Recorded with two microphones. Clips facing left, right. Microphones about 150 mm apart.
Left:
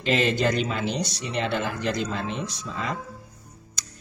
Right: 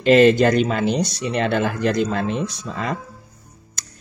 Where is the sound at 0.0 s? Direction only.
55° right (ahead or behind).